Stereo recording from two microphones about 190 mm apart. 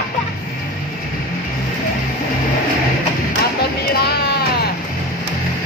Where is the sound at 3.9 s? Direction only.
55° left (ahead or behind).